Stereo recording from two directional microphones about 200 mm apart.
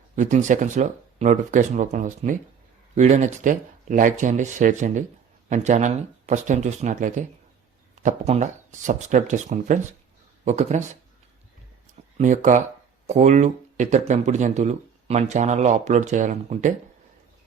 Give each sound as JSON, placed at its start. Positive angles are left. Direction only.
{"t": 0.2, "sound": "speech", "side_deg": -40}
{"t": 12.1, "sound": "speech", "side_deg": -40}